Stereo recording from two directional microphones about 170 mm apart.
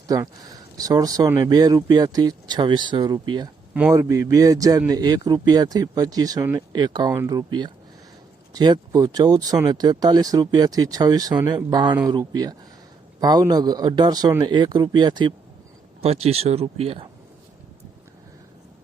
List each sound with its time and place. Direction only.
0.1 s speech: 20° right (ahead or behind)
7.1 s speech: 15° right (ahead or behind)
7.3 s speech: 25° right (ahead or behind)
16.0 s speech: 35° right (ahead or behind)